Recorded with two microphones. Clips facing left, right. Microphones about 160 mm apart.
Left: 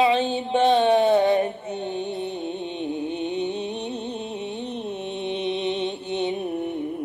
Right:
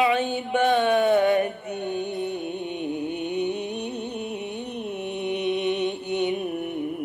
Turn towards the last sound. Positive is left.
turn(degrees=25)  # may be behind; listen again after turning